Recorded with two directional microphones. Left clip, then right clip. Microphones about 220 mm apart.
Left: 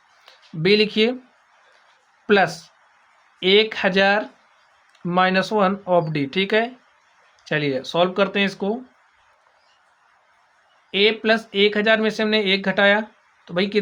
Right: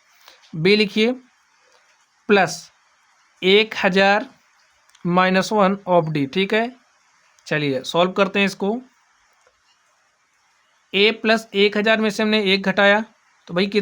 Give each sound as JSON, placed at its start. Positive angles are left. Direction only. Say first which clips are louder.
{"t": 0.3, "sound": "speech", "louder": "right 1 dB", "side_deg": -25}
{"t": 2.2, "sound": "speech", "louder": "right 1 dB", "side_deg": -25}
{"t": 10.9, "sound": "speech", "louder": "right 1 dB", "side_deg": -30}